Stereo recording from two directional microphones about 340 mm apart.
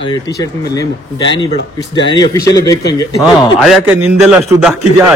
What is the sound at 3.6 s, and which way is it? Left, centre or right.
Speech, centre.